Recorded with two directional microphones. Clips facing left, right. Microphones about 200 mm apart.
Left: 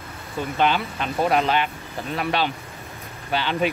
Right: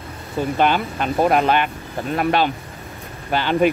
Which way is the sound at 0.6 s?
50° right (ahead or behind).